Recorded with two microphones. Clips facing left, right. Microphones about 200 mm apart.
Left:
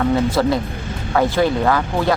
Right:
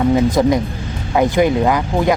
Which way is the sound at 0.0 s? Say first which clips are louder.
Right 3 dB; 15° right (ahead or behind).